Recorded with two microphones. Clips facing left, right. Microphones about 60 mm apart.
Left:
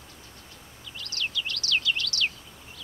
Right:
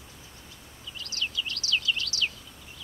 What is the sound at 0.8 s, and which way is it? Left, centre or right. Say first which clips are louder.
Bird: left 1 dB; left.